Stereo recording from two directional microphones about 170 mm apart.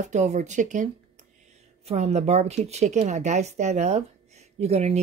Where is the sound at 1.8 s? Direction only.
40° right (ahead or behind).